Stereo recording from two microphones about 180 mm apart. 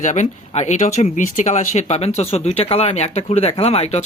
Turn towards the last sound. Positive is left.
turn(degrees=35)  # may be behind; listen again after turning